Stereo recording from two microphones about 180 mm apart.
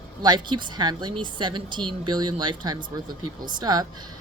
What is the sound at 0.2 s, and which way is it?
A woman's voice, 25° right (ahead or behind).